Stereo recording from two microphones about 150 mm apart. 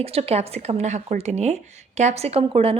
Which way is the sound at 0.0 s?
40° right (ahead or behind).